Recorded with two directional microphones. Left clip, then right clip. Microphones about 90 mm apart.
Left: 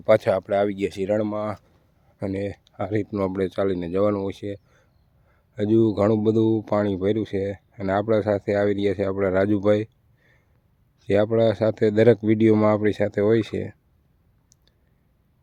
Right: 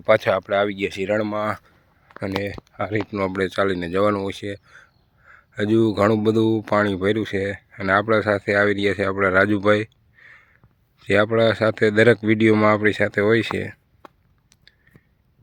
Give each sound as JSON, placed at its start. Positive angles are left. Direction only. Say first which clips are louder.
{"t": 0.0, "sound": "speech", "louder": "right 1 dB", "side_deg": 30}
{"t": 1.4, "sound": "speech", "louder": "right 4 dB", "side_deg": 10}
{"t": 2.2, "sound": "speech", "louder": "right 2 dB", "side_deg": 20}
{"t": 3.3, "sound": "speech", "louder": "right 4 dB", "side_deg": 15}
{"t": 7.8, "sound": "speech", "louder": "right 3 dB", "side_deg": 20}